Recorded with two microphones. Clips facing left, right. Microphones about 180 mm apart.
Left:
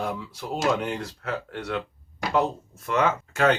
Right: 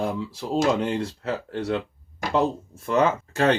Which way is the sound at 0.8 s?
30° right (ahead or behind).